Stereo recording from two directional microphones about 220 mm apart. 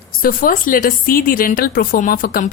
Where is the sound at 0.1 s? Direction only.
40° left (ahead or behind).